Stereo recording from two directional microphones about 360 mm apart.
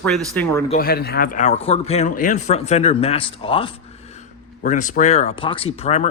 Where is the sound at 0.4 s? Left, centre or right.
Centre.